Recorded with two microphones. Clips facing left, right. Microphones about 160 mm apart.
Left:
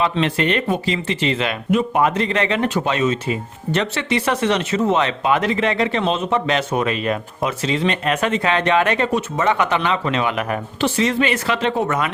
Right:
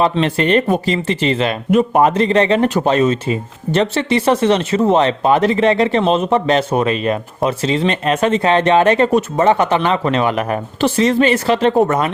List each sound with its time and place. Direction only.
0.0 s speech: 40° right (ahead or behind)